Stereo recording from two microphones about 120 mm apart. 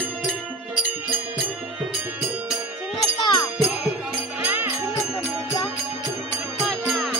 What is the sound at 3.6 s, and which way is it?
Music, centre (ahead or behind).